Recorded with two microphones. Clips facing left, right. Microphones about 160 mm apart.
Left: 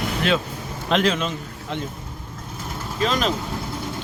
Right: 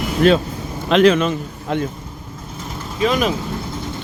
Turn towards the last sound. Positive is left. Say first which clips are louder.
# right 4 dB
turn(degrees=-10)  # may be behind; listen again after turning